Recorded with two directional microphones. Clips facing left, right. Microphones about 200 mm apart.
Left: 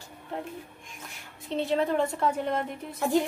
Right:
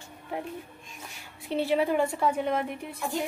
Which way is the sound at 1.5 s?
10° right (ahead or behind).